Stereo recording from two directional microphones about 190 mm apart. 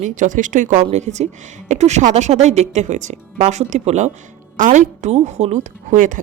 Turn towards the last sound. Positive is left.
turn(degrees=-40)  # may be behind; listen again after turning